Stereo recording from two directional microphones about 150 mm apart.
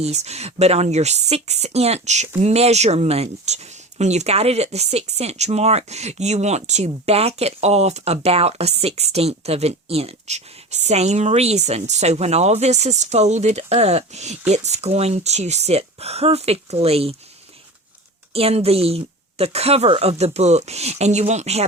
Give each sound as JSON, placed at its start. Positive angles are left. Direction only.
{"t": 0.0, "sound": "speech", "side_deg": -45}
{"t": 18.3, "sound": "speech", "side_deg": -40}